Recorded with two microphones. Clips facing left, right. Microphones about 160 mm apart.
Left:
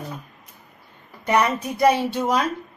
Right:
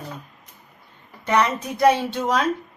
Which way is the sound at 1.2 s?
10° left (ahead or behind).